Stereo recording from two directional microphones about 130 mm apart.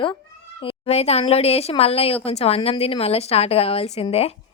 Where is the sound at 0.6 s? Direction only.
55° left (ahead or behind).